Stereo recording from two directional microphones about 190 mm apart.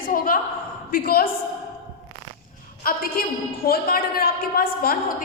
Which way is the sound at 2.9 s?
50° left (ahead or behind).